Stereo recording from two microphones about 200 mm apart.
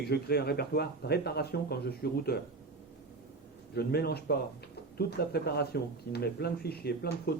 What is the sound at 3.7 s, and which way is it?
A man's voice, 55° left (ahead or behind).